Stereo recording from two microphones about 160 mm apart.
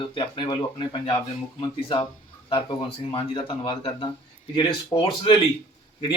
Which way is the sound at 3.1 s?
30° left (ahead or behind).